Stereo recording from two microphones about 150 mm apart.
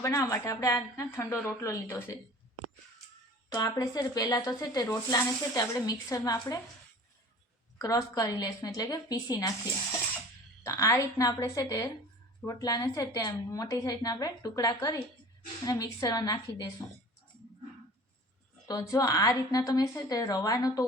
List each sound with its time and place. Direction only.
0.0 s speech: 20° left (ahead or behind)
3.5 s speech: 25° left (ahead or behind)
7.8 s speech: 25° left (ahead or behind)
10.6 s speech: 20° left (ahead or behind)
18.7 s speech: 25° left (ahead or behind)